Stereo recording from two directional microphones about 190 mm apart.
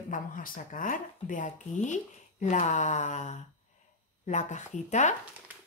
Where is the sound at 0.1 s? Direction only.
45° left (ahead or behind).